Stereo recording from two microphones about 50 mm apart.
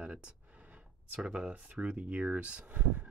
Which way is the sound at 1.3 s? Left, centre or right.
Right.